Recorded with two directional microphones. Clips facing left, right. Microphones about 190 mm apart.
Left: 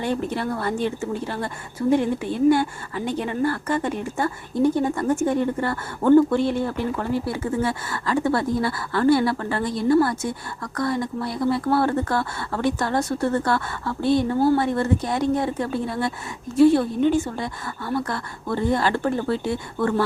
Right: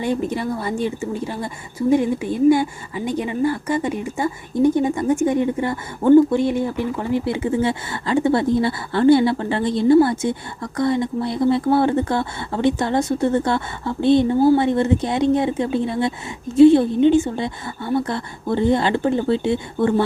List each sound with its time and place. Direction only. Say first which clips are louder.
0.3 s speech: right 2 dB; 10° right (ahead or behind)
14.3 s speech: right 4 dB; 10° right (ahead or behind)
14.6 s speech: right 4 dB; 20° right (ahead or behind)